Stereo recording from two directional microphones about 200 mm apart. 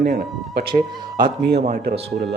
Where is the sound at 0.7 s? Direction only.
20° right (ahead or behind).